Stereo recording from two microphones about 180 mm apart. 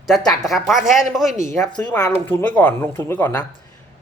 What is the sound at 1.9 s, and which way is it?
A man's voice, 10° left (ahead or behind).